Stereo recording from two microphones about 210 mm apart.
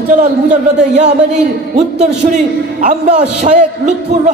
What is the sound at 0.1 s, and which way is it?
A man's voice, 35° right (ahead or behind).